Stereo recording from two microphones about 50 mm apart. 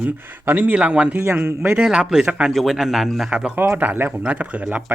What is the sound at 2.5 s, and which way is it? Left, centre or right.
Speech, centre.